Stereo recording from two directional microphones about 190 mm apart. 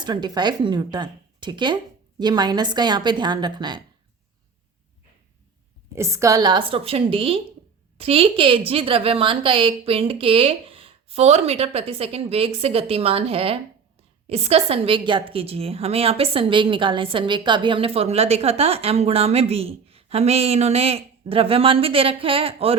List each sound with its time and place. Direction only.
0.0 s speech: 25° right (ahead or behind)
5.9 s a woman's voice: 15° right (ahead or behind); by 22.8 s 30° right (ahead or behind)